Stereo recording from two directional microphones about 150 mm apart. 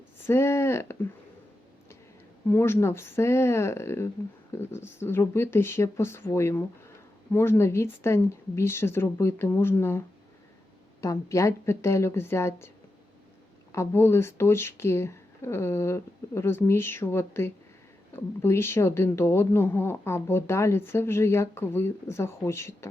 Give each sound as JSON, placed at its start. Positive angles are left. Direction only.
{"t": 0.3, "sound": "speech", "side_deg": 15}
{"t": 2.5, "sound": "speech", "side_deg": 15}
{"t": 11.0, "sound": "speech", "side_deg": 20}
{"t": 13.7, "sound": "speech", "side_deg": 15}